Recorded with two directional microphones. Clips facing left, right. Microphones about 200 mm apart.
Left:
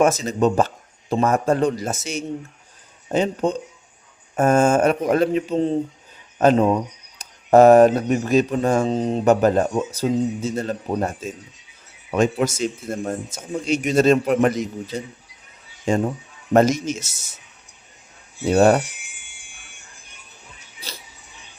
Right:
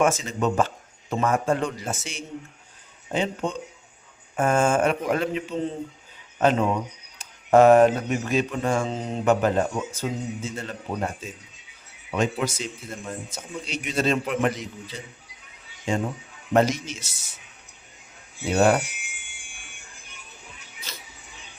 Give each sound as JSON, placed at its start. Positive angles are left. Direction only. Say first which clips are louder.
{"t": 0.0, "sound": "speech", "louder": "left 5 dB", "side_deg": 40}
{"t": 12.1, "sound": "a man's voice", "louder": "left 6 dB", "side_deg": 45}
{"t": 16.5, "sound": "a man's voice", "louder": "left 5 dB", "side_deg": 45}
{"t": 18.4, "sound": "speech", "louder": "left 5 dB", "side_deg": 40}
{"t": 20.9, "sound": "mouse", "louder": "left 4 dB", "side_deg": 35}